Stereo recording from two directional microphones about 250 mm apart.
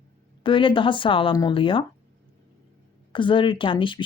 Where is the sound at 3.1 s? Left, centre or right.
Centre.